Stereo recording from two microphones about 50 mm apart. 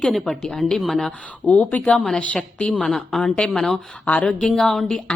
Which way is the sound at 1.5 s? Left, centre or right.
Left.